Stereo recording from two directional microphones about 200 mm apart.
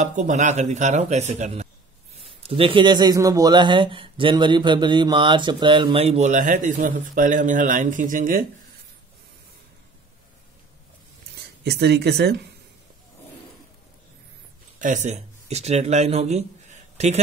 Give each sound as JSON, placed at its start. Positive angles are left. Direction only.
{"t": 0.0, "sound": "speech", "side_deg": -35}
{"t": 11.3, "sound": "speech", "side_deg": -55}
{"t": 14.8, "sound": "speech", "side_deg": -40}